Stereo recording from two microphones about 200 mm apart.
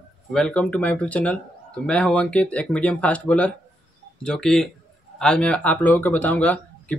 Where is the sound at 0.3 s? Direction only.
5° left (ahead or behind).